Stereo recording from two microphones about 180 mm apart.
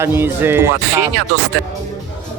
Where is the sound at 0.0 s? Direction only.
10° right (ahead or behind).